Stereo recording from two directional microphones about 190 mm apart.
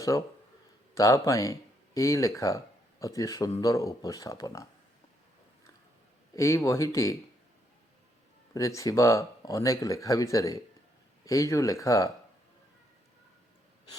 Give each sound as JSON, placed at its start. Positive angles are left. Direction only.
{"t": 0.9, "sound": "speech", "side_deg": 15}
{"t": 6.3, "sound": "speech", "side_deg": 15}
{"t": 8.5, "sound": "speech", "side_deg": 15}